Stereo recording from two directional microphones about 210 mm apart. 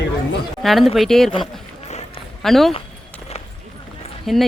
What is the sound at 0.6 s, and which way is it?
Speech, centre (ahead or behind).